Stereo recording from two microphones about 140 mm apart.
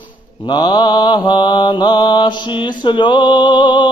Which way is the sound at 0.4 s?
30° left (ahead or behind).